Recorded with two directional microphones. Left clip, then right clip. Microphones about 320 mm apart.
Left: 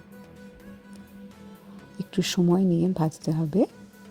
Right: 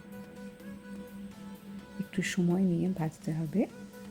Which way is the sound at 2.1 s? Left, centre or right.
Centre.